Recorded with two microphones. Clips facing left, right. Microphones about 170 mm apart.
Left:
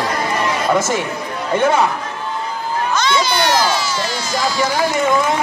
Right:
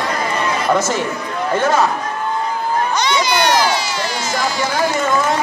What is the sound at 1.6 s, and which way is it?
Speech, 15° left (ahead or behind).